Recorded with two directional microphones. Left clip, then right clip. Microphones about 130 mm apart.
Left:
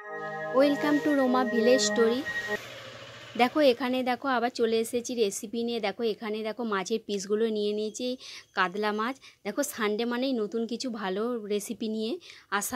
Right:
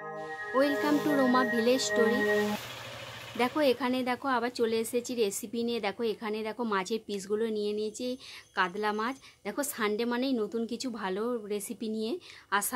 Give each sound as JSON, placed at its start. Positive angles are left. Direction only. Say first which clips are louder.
{"t": 0.6, "sound": "speech", "louder": "left 3 dB", "side_deg": 30}
{"t": 3.3, "sound": "speech", "louder": "left 4 dB", "side_deg": 40}